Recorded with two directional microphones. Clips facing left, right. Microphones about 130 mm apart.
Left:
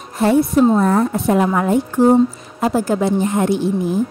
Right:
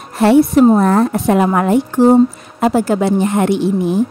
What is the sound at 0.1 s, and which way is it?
A woman's voice, 75° right (ahead or behind).